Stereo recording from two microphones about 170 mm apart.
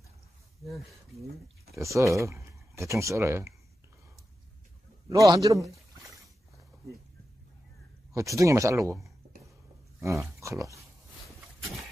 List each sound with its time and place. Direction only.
1.8 s speech: 15° right (ahead or behind)
5.1 s speech: 20° right (ahead or behind)
8.1 s speech: 20° right (ahead or behind)
10.4 s speech: 20° right (ahead or behind)